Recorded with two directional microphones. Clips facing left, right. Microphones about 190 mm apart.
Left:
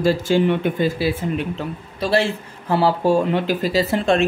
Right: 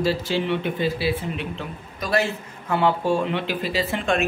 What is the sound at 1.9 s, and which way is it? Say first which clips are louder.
Speech: left 4 dB; 30° left (ahead or behind).